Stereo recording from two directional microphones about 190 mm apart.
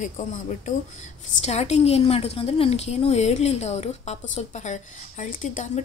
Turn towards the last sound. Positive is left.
turn(degrees=40)  # may be behind; listen again after turning